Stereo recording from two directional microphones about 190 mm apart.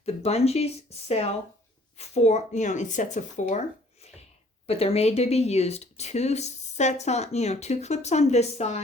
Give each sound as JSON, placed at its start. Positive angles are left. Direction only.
{"t": 0.0, "sound": "speech", "side_deg": 35}
{"t": 4.6, "sound": "speech", "side_deg": 30}